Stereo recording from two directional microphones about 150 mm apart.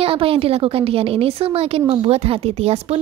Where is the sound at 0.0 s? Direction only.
40° right (ahead or behind).